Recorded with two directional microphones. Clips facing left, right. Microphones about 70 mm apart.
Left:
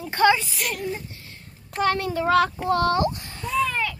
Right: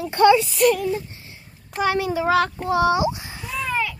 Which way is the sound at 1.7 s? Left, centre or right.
Centre.